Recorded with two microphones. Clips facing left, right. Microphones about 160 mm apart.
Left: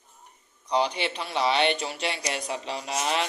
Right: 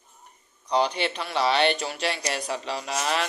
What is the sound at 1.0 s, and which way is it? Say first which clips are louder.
A man's voice: right 2 dB; 25° left (ahead or behind).